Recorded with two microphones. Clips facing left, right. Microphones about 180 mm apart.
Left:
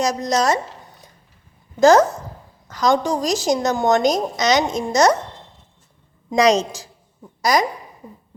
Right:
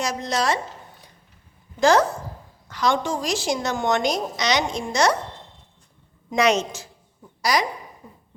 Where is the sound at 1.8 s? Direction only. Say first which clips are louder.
Left 5 dB; 45° left (ahead or behind).